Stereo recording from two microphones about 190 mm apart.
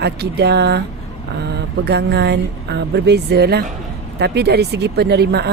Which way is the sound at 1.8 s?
60° right (ahead or behind).